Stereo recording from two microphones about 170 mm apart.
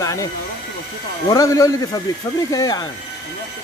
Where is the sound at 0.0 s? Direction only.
20° left (ahead or behind).